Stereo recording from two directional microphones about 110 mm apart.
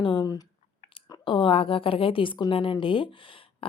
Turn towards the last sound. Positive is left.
turn(degrees=55)  # may be behind; listen again after turning